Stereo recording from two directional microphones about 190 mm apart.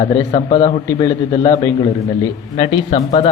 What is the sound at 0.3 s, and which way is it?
Speech, 25° left (ahead or behind).